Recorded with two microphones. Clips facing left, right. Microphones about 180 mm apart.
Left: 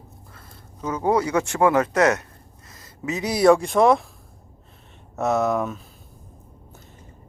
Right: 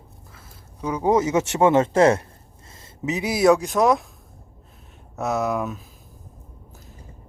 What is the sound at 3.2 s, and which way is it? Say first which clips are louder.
Speech: left 1 dB; 5° right (ahead or behind).